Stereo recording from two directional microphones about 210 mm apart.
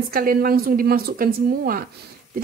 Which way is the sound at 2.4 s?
45° right (ahead or behind).